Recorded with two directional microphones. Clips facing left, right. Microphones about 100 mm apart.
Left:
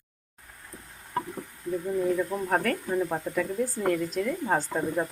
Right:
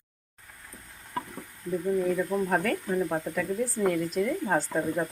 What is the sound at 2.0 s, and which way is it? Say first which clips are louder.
Speech: even; 5° left (ahead or behind).